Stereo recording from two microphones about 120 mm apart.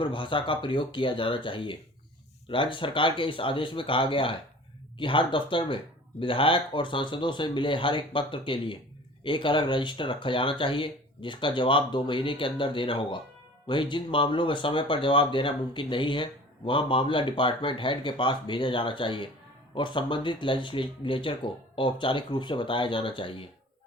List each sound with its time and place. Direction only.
0.0 s speech: 45° left (ahead or behind)